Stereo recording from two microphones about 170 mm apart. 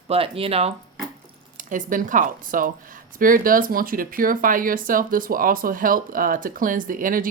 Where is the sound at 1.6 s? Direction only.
50° right (ahead or behind).